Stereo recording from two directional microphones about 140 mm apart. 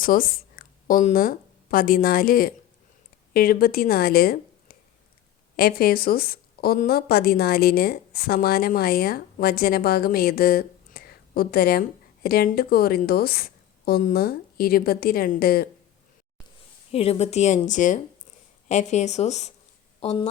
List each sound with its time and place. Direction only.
0.0 s a woman's voice: 90° left
5.5 s a woman's voice: 90° left
16.9 s a woman's voice: 45° left (ahead or behind)